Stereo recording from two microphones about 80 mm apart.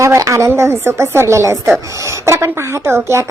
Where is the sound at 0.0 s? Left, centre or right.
Right.